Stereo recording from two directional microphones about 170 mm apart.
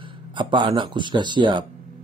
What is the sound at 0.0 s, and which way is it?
Speech, 30° right (ahead or behind).